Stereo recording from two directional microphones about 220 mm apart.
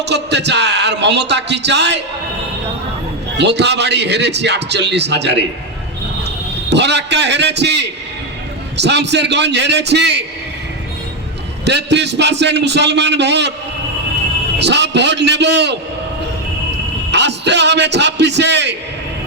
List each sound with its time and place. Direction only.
0.0 s a man's voice: 50° right (ahead or behind)
3.3 s a man's voice: 50° right (ahead or behind)
6.7 s a man's voice: 50° right (ahead or behind)
11.6 s a man's voice: 50° right (ahead or behind)
14.6 s a man's voice: 50° right (ahead or behind)
17.1 s a man's voice: 50° right (ahead or behind)